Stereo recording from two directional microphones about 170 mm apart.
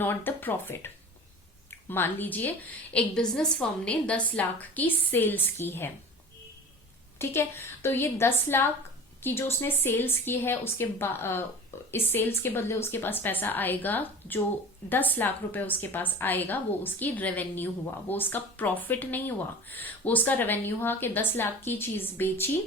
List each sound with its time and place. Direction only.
0.0 s a woman's voice: 10° left (ahead or behind)
1.9 s a woman's voice: 10° left (ahead or behind)
7.2 s a woman's voice: 15° left (ahead or behind)